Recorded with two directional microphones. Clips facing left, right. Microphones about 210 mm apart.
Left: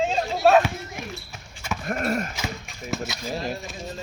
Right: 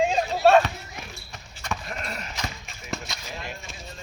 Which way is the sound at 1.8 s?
50° left (ahead or behind).